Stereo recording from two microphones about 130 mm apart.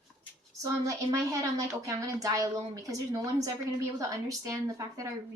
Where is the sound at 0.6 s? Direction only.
25° right (ahead or behind).